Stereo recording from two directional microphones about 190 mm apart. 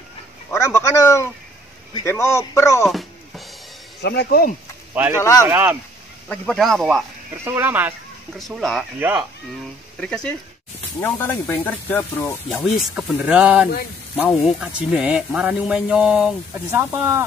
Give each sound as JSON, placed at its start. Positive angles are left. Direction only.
{"t": 0.5, "sound": "a man's voice", "side_deg": 15}
{"t": 2.8, "sound": "music", "side_deg": 0}
{"t": 4.0, "sound": "speech", "side_deg": 60}
{"t": 4.9, "sound": "speech", "side_deg": -10}
{"t": 6.2, "sound": "a man's voice", "side_deg": 5}
{"t": 7.4, "sound": "speech", "side_deg": -10}
{"t": 8.4, "sound": "a man's voice", "side_deg": 0}
{"t": 9.9, "sound": "a man's voice", "side_deg": 5}